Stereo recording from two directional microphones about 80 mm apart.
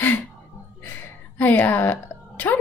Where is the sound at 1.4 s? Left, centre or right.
Left.